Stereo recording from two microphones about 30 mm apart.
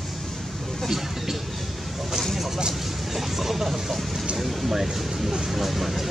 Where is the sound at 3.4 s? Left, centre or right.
Centre.